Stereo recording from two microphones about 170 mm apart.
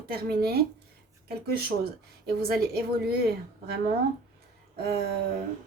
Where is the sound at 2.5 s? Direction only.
65° right (ahead or behind).